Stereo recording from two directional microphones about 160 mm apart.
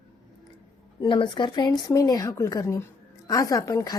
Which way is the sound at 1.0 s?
30° left (ahead or behind).